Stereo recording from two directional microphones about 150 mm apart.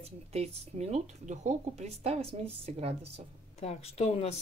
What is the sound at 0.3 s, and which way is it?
Speech, 45° right (ahead or behind).